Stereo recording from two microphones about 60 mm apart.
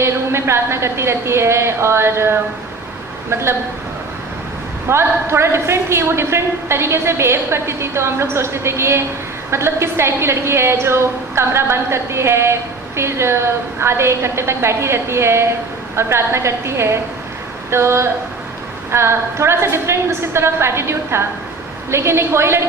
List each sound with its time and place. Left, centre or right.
0.0 s a man's voice: right
4.9 s a man's voice: right